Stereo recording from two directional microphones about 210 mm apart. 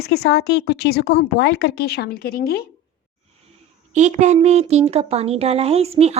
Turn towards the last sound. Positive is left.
turn(degrees=-30)  # may be behind; listen again after turning